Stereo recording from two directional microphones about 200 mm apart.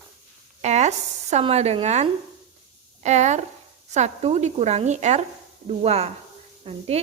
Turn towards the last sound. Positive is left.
turn(degrees=-30)  # may be behind; listen again after turning